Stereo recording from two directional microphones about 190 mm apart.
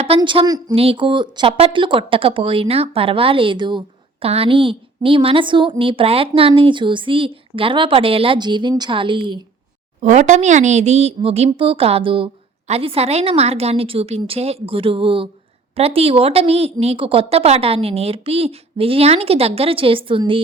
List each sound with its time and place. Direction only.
0.2 s a woman's voice: 25° right (ahead or behind)
10.0 s speech: 40° right (ahead or behind)